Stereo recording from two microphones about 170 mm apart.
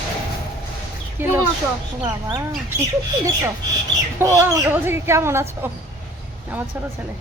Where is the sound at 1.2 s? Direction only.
10° right (ahead or behind).